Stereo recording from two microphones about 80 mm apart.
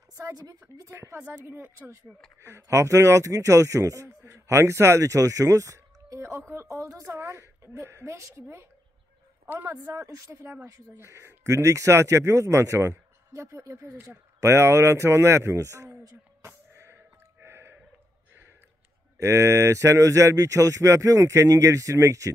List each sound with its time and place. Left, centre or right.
0.2 s a woman's voice: right
0.8 s a man's voice: right
9.8 s a man's voice: right
16.4 s a sound: right
19.1 s a man's voice: right